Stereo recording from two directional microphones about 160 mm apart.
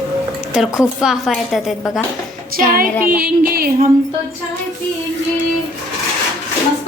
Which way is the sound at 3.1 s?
70° right (ahead or behind).